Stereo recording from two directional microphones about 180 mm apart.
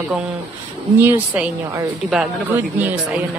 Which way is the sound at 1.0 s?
10° right (ahead or behind).